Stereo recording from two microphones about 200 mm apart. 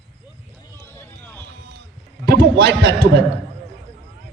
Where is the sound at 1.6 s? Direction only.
55° right (ahead or behind).